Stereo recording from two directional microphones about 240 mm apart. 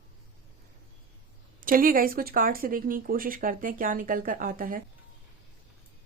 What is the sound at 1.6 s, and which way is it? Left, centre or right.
Speech, right.